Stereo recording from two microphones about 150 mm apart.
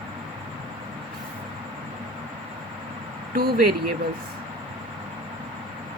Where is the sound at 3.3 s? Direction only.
75° right (ahead or behind).